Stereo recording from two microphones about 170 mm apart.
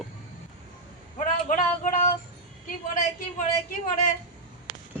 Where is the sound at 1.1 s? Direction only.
50° left (ahead or behind).